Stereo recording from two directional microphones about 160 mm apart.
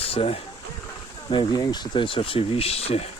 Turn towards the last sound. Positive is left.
turn(degrees=40)  # may be behind; listen again after turning